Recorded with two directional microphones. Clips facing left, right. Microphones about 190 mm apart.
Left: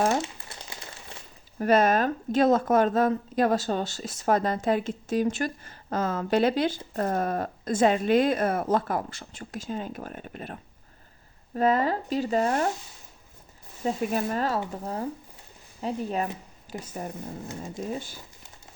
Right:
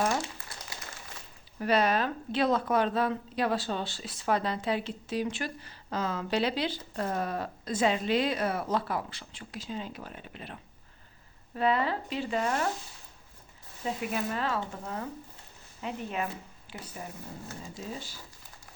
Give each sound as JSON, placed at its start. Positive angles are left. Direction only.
{"t": 0.1, "sound": "crumpling", "side_deg": 25}
{"t": 1.5, "sound": "a woman's voice", "side_deg": 45}
{"t": 13.8, "sound": "a woman's voice", "side_deg": 40}